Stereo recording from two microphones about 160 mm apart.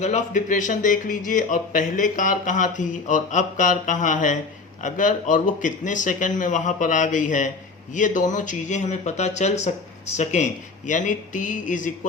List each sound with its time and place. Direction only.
0.0 s speech: 50° left (ahead or behind)